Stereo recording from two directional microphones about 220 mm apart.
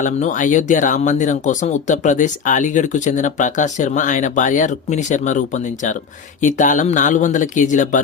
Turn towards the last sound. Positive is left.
turn(degrees=35)  # may be behind; listen again after turning